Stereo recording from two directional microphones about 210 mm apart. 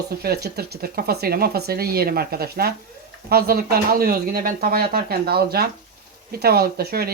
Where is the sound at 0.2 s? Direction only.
50° right (ahead or behind).